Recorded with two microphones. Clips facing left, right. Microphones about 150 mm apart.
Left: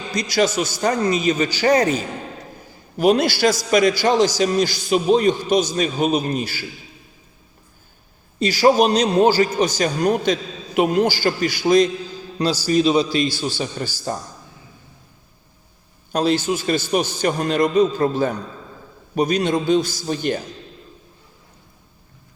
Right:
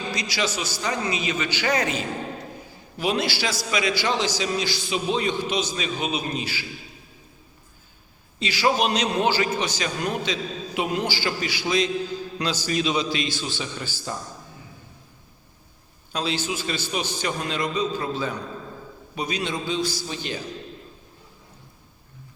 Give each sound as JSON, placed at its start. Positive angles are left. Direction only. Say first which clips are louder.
{"t": 0.1, "sound": "a man's voice", "louder": "left 10 dB", "side_deg": 45}
{"t": 3.0, "sound": "a man's voice", "louder": "left 9 dB", "side_deg": 45}
{"t": 8.4, "sound": "a man's voice", "louder": "left 7 dB", "side_deg": 40}
{"t": 12.4, "sound": "a man's voice", "louder": "left 9 dB", "side_deg": 35}
{"t": 16.1, "sound": "a man's voice", "louder": "left 8 dB", "side_deg": 45}